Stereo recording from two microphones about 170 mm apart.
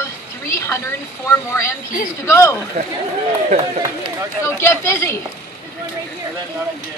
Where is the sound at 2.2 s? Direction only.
15° left (ahead or behind).